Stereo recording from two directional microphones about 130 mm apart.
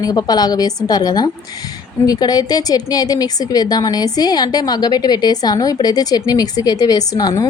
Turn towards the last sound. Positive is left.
turn(degrees=30)  # may be behind; listen again after turning